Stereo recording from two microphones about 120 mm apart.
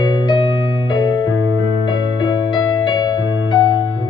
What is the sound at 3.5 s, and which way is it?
Music, 40° left (ahead or behind).